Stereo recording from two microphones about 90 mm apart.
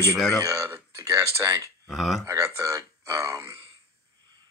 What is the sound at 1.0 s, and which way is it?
Speech, 30° right (ahead or behind).